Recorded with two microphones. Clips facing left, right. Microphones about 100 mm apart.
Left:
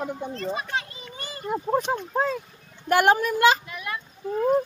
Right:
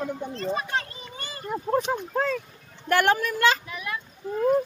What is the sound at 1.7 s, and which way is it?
Speech, 10° left (ahead or behind).